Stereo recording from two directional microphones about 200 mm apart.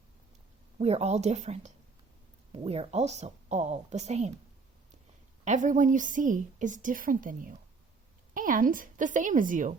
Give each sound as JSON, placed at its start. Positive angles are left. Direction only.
{"t": 0.8, "sound": "a woman's voice", "side_deg": -30}
{"t": 5.5, "sound": "a woman's voice", "side_deg": -40}